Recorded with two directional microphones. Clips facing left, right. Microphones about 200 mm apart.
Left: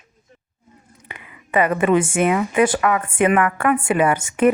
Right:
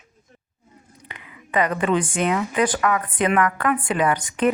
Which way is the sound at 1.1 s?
10° left (ahead or behind).